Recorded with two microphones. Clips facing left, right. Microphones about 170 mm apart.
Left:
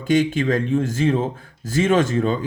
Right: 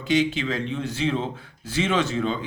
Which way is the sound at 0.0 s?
50° left (ahead or behind).